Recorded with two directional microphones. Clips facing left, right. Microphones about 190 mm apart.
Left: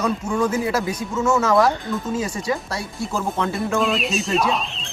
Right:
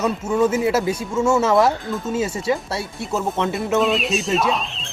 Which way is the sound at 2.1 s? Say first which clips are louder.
Right 4 dB; 25° right (ahead or behind).